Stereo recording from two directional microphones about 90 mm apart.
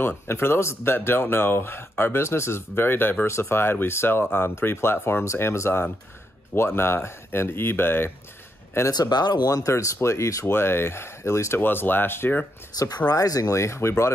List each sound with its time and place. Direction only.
0.3 s speech: 25° left (ahead or behind)
8.9 s speech: 50° left (ahead or behind); by 12.4 s 25° left (ahead or behind)
12.7 s speech: 45° left (ahead or behind)